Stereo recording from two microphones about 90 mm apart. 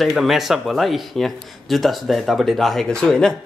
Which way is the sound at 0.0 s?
Centre (ahead or behind).